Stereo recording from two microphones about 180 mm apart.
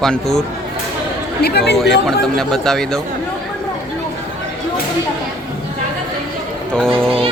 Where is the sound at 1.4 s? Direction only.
65° left (ahead or behind).